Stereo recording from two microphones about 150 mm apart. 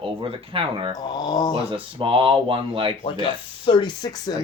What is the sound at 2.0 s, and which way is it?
Speech, 35° right (ahead or behind).